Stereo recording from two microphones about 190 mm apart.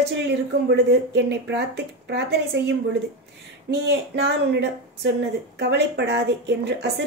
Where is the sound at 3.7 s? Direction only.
65° right (ahead or behind).